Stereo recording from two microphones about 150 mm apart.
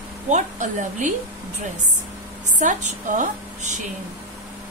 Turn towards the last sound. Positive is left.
turn(degrees=-55)  # may be behind; listen again after turning